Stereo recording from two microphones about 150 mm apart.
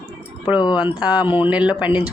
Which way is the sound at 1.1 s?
30° left (ahead or behind).